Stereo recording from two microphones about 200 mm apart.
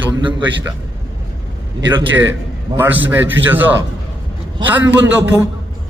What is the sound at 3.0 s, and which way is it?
Speech, 10° right (ahead or behind).